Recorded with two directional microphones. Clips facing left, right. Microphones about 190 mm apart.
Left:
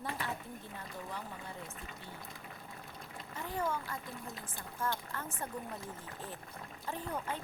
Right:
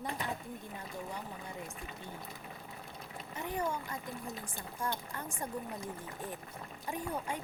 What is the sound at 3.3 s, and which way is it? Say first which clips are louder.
Speech: right 1 dB; 15° right (ahead or behind).